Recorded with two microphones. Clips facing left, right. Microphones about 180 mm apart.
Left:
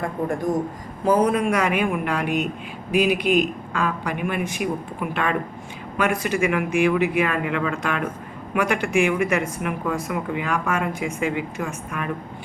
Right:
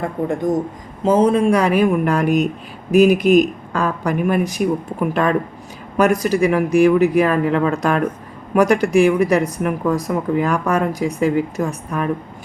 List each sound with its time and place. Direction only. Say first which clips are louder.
1.0 s speech: right 5 dB; 25° right (ahead or behind)